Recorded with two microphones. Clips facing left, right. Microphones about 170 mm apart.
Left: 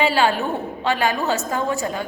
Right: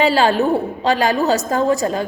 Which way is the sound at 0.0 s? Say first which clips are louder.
Right 4 dB; 40° right (ahead or behind).